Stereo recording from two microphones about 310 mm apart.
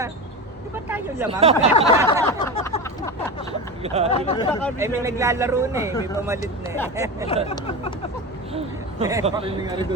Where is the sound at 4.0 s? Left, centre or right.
Right.